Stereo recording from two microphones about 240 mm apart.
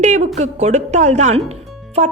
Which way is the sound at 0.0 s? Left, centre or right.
Right.